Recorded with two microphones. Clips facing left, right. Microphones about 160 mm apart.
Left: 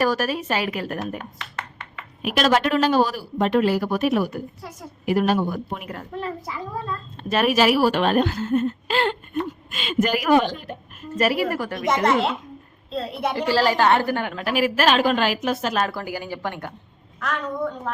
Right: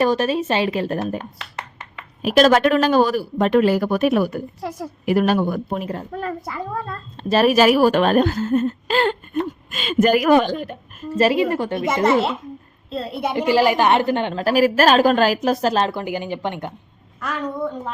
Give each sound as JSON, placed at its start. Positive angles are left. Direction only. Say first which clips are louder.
{"t": 0.0, "sound": "a woman's voice", "louder": "right 4 dB", "side_deg": -25}
{"t": 5.7, "sound": "a woman's voice", "louder": "right 6 dB", "side_deg": -30}
{"t": 6.1, "sound": "speech", "louder": "right 3 dB", "side_deg": -45}
{"t": 7.2, "sound": "speech", "louder": "right 4 dB", "side_deg": -35}
{"t": 11.2, "sound": "a woman's voice", "louder": "right 4 dB", "side_deg": -25}
{"t": 12.0, "sound": "a woman's voice", "louder": "right 5 dB", "side_deg": -5}
{"t": 13.3, "sound": "a woman's voice", "louder": "right 4 dB", "side_deg": -15}